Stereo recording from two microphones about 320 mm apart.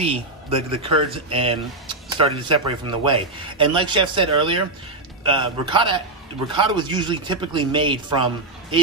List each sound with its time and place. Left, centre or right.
0.0 s speech: centre